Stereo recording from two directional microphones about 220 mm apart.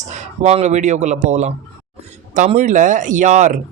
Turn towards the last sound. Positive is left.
turn(degrees=-35)  # may be behind; listen again after turning